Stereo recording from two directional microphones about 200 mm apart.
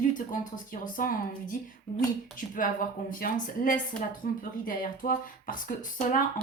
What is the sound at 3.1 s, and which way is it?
Speech, 45° left (ahead or behind).